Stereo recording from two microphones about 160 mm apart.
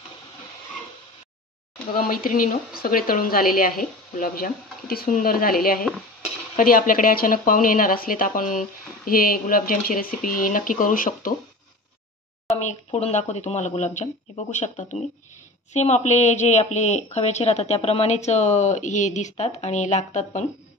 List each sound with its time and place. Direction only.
2.0 s speech: 60° left (ahead or behind)
12.4 s speech: 45° left (ahead or behind)